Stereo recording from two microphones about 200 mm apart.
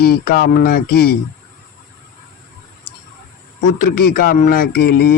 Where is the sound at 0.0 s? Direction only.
50° left (ahead or behind).